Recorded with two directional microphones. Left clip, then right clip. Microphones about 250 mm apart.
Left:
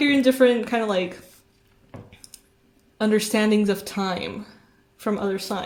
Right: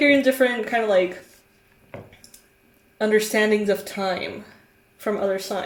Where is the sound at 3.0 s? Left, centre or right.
Left.